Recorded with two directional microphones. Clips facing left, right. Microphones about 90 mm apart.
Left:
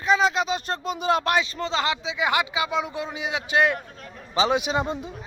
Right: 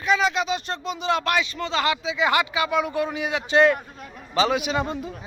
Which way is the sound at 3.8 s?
10° right (ahead or behind).